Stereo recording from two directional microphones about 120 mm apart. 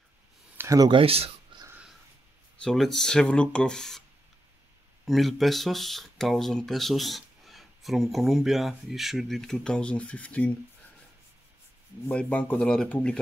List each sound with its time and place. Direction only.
0.6 s a sound: 25° right (ahead or behind)
0.8 s speech: 50° right (ahead or behind)
1.5 s a sound: 45° right (ahead or behind)
2.6 s speech: 5° left (ahead or behind)
5.0 s speech: centre (ahead or behind)
12.1 s speech: 10° left (ahead or behind)